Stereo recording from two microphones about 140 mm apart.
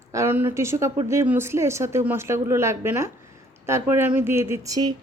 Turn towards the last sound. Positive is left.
turn(degrees=-25)  # may be behind; listen again after turning